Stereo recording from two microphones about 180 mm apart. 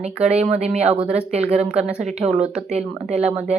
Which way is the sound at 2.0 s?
35° right (ahead or behind).